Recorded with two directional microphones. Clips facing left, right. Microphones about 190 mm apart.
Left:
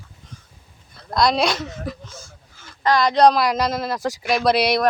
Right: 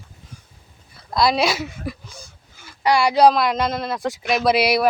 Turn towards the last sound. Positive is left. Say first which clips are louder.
# even
turn(degrees=-5)  # may be behind; listen again after turning